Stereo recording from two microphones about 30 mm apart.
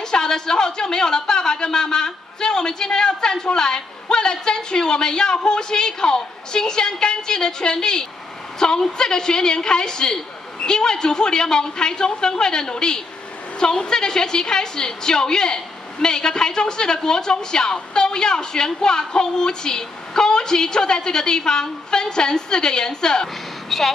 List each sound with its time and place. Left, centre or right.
0.0 s speech: left
23.2 s speech: centre